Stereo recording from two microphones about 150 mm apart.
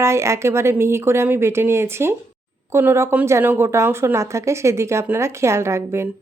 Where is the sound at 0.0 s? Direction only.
20° right (ahead or behind).